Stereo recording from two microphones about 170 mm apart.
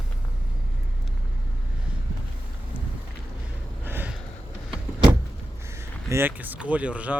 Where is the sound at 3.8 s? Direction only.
10° right (ahead or behind).